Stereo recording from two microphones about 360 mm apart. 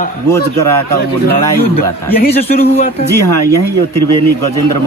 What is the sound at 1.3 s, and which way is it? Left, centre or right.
Speech, left.